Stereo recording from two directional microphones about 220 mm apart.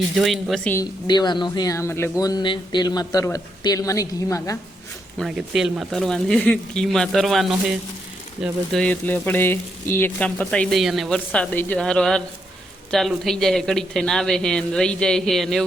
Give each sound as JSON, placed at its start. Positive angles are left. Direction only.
{"t": 0.2, "sound": "speech", "side_deg": 0}
{"t": 5.1, "sound": "speech", "side_deg": 0}